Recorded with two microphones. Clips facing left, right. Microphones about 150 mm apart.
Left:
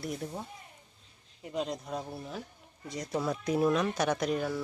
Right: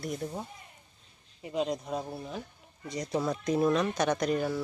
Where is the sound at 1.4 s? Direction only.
Centre (ahead or behind).